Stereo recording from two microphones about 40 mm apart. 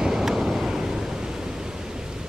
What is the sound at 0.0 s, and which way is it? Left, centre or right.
Vehicle, centre.